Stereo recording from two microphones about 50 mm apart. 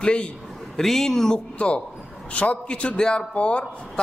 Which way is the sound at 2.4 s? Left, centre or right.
Left.